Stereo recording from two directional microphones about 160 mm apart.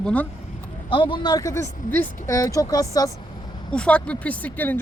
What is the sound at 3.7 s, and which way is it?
Speech, 5° left (ahead or behind).